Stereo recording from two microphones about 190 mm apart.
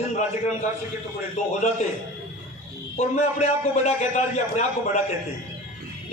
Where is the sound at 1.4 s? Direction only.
35° left (ahead or behind).